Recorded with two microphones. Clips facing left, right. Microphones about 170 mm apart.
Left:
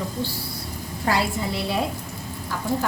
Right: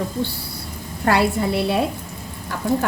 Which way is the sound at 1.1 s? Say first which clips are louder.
Right 6 dB; 60° right (ahead or behind).